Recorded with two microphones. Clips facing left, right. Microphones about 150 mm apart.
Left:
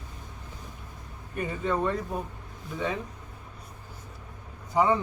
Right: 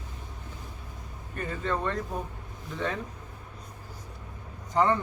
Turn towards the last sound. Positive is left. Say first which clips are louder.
# left 1 dB
turn(degrees=10)  # may be behind; listen again after turning